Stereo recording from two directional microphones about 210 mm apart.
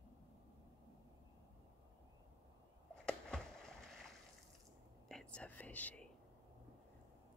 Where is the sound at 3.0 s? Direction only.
5° left (ahead or behind).